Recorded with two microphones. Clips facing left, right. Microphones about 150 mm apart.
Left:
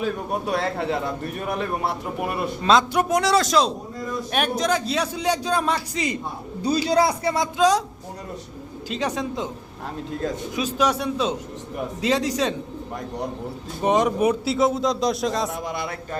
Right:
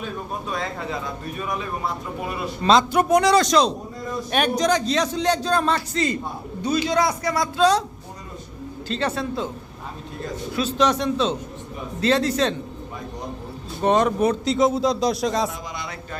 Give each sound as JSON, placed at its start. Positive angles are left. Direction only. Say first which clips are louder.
{"t": 0.0, "sound": "a man's voice", "louder": "left 5 dB", "side_deg": 70}
{"t": 2.6, "sound": "a man's voice", "louder": "right 2 dB", "side_deg": 0}
{"t": 6.6, "sound": "speech", "louder": "left 1 dB", "side_deg": 35}
{"t": 7.6, "sound": "a man's voice", "louder": "right 1 dB", "side_deg": 10}
{"t": 8.9, "sound": "a man's voice", "louder": "right 1 dB", "side_deg": 10}
{"t": 10.5, "sound": "a man's voice", "louder": "right 3 dB", "side_deg": 10}
{"t": 13.8, "sound": "speech", "louder": "right 1 dB", "side_deg": 15}